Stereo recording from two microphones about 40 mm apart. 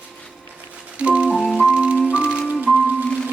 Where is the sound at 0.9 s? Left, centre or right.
Right.